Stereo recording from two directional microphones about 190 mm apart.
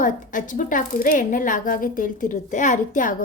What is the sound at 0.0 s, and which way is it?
A woman's voice, 45° left (ahead or behind).